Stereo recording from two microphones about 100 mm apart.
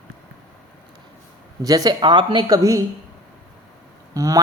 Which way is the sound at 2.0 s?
50° right (ahead or behind).